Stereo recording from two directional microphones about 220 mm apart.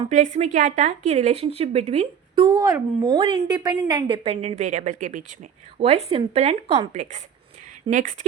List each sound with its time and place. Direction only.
0.0 s a woman's voice: 30° right (ahead or behind)